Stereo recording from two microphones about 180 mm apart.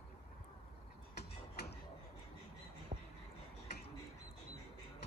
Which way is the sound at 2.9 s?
35° right (ahead or behind).